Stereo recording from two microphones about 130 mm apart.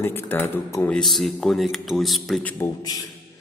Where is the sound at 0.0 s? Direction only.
15° left (ahead or behind).